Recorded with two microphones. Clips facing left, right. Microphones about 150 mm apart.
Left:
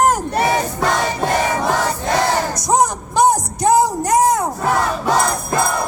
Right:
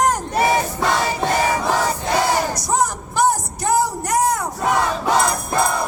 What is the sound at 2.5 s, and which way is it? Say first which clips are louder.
Music: left 4 dB; 20° left (ahead or behind).